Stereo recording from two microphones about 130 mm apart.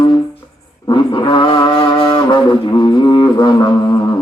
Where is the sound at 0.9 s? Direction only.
40° left (ahead or behind).